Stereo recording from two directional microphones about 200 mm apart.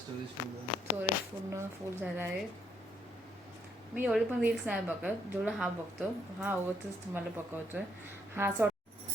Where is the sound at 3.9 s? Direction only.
5° right (ahead or behind).